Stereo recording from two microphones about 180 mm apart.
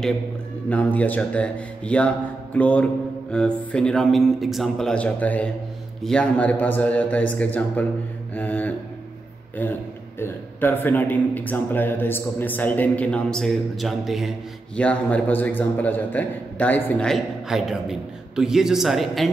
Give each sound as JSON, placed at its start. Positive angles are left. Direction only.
{"t": 0.7, "sound": "a man's voice", "side_deg": 10}
{"t": 8.4, "sound": "a sound", "side_deg": 10}
{"t": 9.6, "sound": "a man's voice", "side_deg": 10}